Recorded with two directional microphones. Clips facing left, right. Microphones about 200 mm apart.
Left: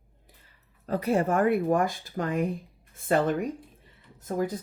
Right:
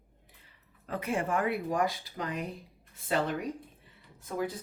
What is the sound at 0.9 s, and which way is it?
Speech, 35° left (ahead or behind).